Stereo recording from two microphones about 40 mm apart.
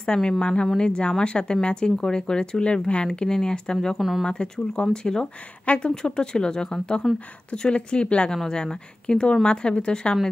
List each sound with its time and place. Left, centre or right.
0.0 s speech: centre